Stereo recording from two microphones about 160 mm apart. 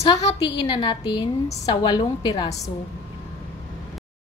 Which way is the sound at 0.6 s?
30° left (ahead or behind).